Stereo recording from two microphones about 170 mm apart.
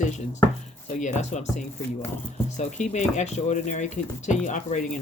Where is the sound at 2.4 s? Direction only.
45° left (ahead or behind).